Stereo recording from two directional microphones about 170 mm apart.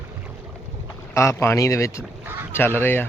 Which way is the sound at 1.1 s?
15° left (ahead or behind).